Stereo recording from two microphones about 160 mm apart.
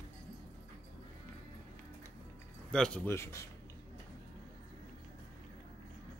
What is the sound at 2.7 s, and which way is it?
Speech, 5° left (ahead or behind).